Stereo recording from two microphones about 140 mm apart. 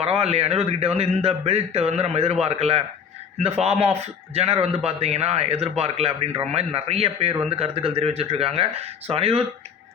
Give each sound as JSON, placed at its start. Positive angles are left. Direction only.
{"t": 0.0, "sound": "a man's voice", "side_deg": -45}